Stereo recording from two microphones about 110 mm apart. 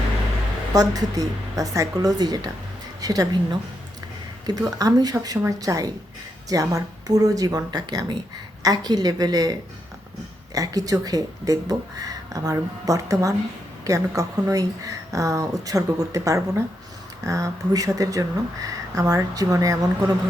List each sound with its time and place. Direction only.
0.7 s speech: 35° right (ahead or behind)